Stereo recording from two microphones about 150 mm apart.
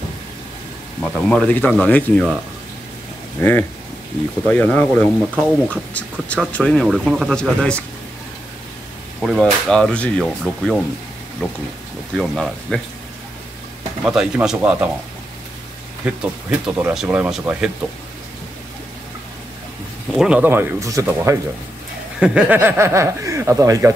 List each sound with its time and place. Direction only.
1.0 s speech: 5° left (ahead or behind)
3.3 s speech: 15° left (ahead or behind)
9.2 s speech: centre (ahead or behind)
14.0 s speech: 5° right (ahead or behind)
16.1 s speech: 10° right (ahead or behind)
20.2 s speech: 10° right (ahead or behind)
22.2 s speech: 10° right (ahead or behind)